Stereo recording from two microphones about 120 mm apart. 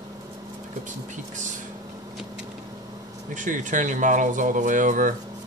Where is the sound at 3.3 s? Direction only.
90° right.